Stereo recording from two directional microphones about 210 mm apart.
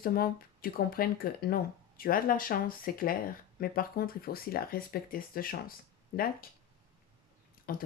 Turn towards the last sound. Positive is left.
turn(degrees=45)  # may be behind; listen again after turning